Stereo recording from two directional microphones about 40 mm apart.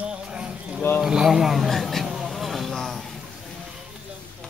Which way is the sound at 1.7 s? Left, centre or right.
Centre.